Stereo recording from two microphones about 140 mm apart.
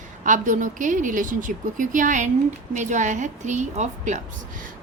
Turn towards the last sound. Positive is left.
turn(degrees=-65)  # may be behind; listen again after turning